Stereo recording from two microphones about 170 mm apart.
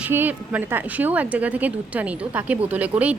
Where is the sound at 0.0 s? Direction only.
10° right (ahead or behind).